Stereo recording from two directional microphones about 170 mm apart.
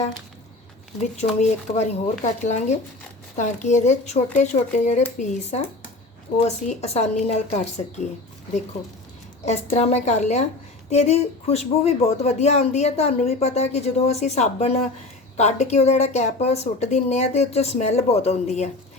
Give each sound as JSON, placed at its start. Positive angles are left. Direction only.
{"t": 1.1, "sound": "speech", "side_deg": 40}
{"t": 9.5, "sound": "speech", "side_deg": 40}